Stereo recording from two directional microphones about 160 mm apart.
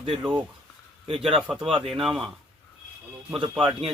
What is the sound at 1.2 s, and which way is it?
Speech, centre (ahead or behind).